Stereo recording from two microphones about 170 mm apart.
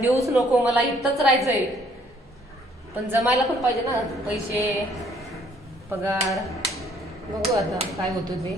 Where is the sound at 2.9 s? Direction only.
20° left (ahead or behind).